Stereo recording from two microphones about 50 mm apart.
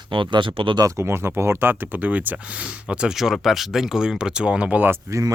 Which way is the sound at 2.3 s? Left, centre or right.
Centre.